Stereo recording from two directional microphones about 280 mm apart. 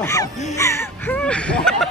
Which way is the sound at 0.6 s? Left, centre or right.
Centre.